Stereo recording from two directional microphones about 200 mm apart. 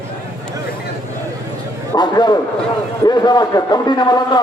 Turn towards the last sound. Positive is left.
turn(degrees=20)  # may be behind; listen again after turning